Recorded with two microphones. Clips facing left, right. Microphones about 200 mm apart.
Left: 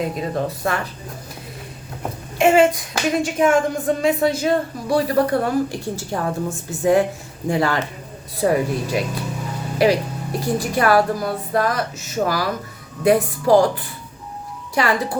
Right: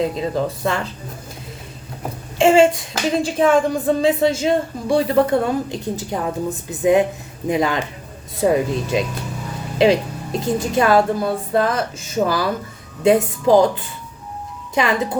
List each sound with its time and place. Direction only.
0.0 s speech: 25° right (ahead or behind)
2.4 s speech: 30° right (ahead or behind)